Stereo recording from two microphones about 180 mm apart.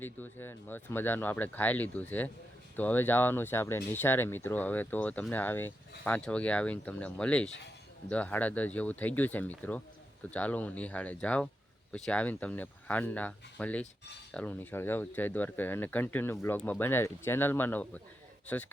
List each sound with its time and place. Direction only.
0.0 s speech: 10° left (ahead or behind)